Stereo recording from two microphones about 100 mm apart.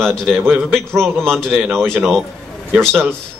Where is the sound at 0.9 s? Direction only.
25° right (ahead or behind).